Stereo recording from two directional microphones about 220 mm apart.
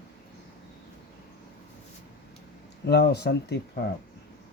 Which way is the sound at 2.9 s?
50° left (ahead or behind).